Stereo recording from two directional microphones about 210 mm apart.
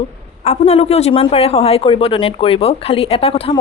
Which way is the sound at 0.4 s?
30° left (ahead or behind).